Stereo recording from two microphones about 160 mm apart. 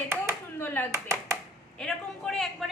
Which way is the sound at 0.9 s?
20° right (ahead or behind).